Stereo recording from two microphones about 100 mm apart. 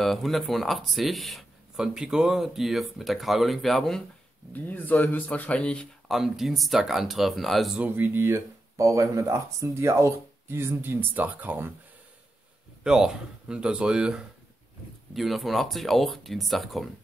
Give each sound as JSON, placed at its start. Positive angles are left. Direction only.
{"t": 0.0, "sound": "speech", "side_deg": 0}
{"t": 4.5, "sound": "speech", "side_deg": 15}
{"t": 6.0, "sound": "speech", "side_deg": -5}
{"t": 7.8, "sound": "speech", "side_deg": -20}
{"t": 12.8, "sound": "speech", "side_deg": -5}